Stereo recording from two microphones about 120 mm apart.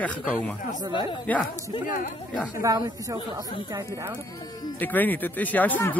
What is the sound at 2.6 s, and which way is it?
Speech, 25° right (ahead or behind).